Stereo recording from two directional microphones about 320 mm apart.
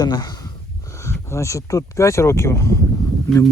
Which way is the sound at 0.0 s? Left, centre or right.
Centre.